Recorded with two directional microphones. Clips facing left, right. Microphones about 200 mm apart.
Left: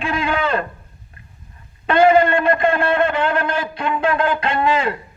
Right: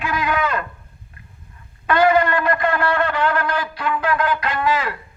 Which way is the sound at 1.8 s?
25° left (ahead or behind).